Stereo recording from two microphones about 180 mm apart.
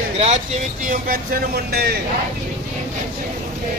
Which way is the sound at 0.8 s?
50° right (ahead or behind).